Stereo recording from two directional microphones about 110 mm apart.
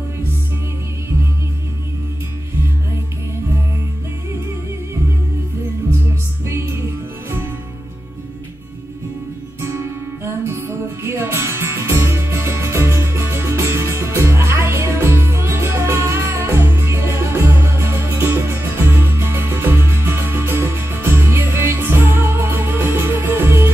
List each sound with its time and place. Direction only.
6.4 s music: 25° right (ahead or behind)
10.2 s music: 25° right (ahead or behind)